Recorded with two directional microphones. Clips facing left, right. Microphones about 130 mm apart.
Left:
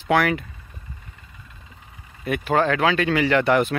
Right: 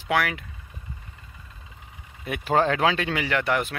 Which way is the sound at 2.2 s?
25° right (ahead or behind).